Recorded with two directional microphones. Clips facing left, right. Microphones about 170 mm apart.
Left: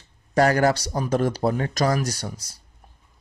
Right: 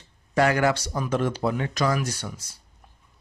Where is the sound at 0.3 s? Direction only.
40° left (ahead or behind).